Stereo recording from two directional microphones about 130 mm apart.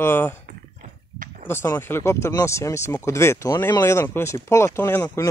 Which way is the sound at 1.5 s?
20° left (ahead or behind).